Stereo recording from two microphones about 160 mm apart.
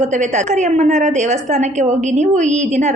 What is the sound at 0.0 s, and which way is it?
A woman's voice, 50° right (ahead or behind).